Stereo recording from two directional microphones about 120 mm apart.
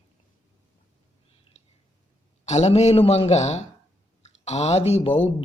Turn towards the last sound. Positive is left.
turn(degrees=60)  # may be behind; listen again after turning